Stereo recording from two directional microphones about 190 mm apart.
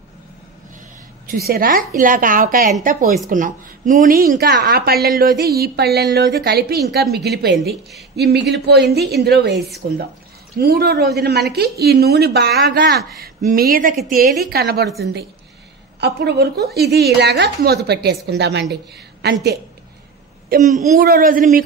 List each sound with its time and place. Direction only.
1.2 s a woman's voice: 50° right (ahead or behind)
4.9 s a woman's voice: centre (ahead or behind)
5.6 s a woman's voice: 55° right (ahead or behind)
9.8 s a woman's voice: 45° right (ahead or behind)
16.0 s a woman's voice: 60° right (ahead or behind)
20.4 s a woman's voice: 45° right (ahead or behind)